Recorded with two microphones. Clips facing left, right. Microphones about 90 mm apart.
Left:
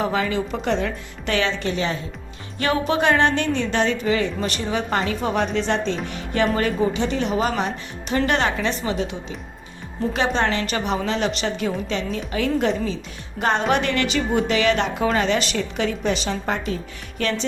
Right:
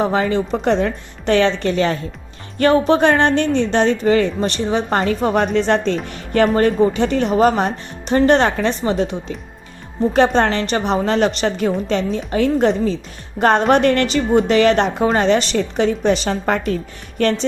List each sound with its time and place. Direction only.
0.0 s a woman's voice: 35° right (ahead or behind)
2.6 s a woman's voice: 40° right (ahead or behind)
4.4 s a woman's voice: 30° right (ahead or behind)
4.9 s a woman's voice: 40° right (ahead or behind)
10.1 s a woman's voice: 40° right (ahead or behind)
11.0 s a woman's voice: 50° right (ahead or behind)